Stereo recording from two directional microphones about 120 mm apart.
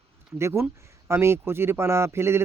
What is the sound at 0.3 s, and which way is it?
Speech, 20° right (ahead or behind).